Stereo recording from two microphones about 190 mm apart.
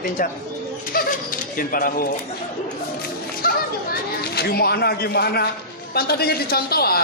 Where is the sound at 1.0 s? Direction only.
50° left (ahead or behind).